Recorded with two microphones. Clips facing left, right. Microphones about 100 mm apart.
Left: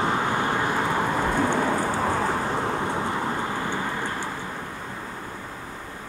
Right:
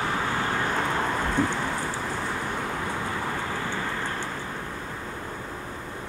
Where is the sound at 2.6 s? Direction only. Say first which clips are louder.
Left 4 dB; 25° left (ahead or behind).